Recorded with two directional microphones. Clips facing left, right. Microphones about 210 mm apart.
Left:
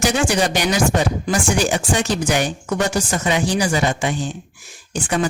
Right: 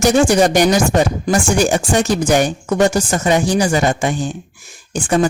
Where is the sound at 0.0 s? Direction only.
45° right (ahead or behind).